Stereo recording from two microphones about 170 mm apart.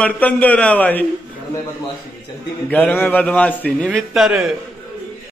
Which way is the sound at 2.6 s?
10° left (ahead or behind).